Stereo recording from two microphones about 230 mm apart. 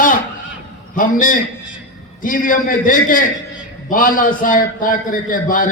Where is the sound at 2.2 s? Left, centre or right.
Left.